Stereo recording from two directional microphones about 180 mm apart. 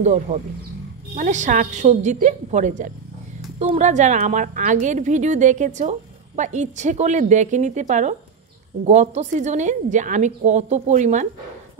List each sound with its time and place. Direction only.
0.0 s a woman's voice: 40° right (ahead or behind)